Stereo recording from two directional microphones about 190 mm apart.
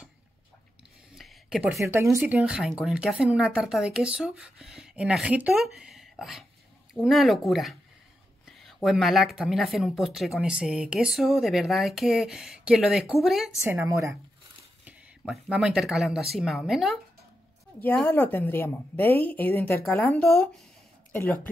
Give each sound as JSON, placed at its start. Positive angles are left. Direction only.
{"t": 1.1, "sound": "a sound", "side_deg": 0}
{"t": 1.9, "sound": "speech", "side_deg": -15}
{"t": 13.6, "sound": "speech", "side_deg": -15}
{"t": 17.7, "sound": "a woman's voice", "side_deg": 10}